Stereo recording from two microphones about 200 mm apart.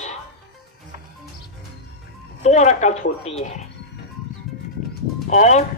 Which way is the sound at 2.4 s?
35° left (ahead or behind).